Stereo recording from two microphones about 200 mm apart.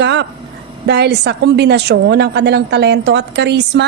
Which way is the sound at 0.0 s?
60° right (ahead or behind).